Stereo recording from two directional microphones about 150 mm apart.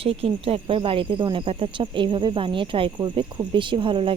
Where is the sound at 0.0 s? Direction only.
40° right (ahead or behind).